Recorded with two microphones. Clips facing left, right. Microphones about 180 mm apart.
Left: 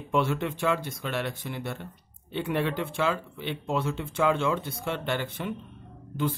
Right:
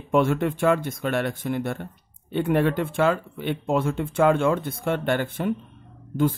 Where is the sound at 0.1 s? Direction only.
50° right (ahead or behind).